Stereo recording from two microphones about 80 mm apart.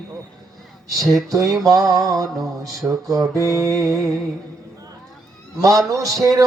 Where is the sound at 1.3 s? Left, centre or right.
Right.